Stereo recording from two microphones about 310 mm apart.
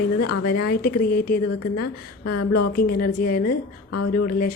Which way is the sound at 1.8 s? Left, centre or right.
Left.